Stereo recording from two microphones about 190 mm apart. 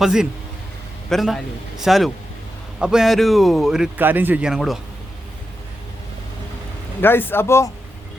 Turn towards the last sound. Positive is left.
turn(degrees=15)  # may be behind; listen again after turning